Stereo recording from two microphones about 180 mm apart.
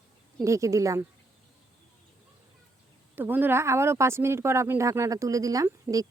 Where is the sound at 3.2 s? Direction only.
10° right (ahead or behind).